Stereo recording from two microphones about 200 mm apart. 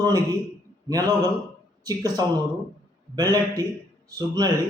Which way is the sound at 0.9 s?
20° right (ahead or behind).